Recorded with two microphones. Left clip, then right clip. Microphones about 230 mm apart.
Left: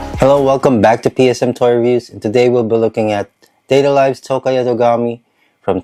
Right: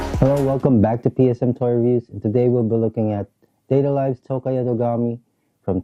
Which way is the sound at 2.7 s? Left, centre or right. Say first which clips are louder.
Left 8 dB; centre.